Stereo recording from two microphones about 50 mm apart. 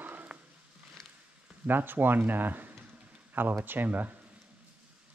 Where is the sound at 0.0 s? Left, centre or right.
Right.